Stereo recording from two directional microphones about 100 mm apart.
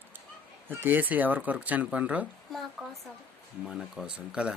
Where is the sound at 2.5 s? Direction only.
Centre (ahead or behind).